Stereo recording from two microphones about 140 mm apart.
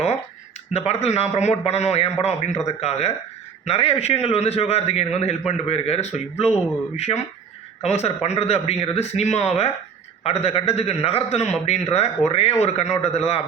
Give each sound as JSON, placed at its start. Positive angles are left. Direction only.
{"t": 0.7, "sound": "speech", "side_deg": 50}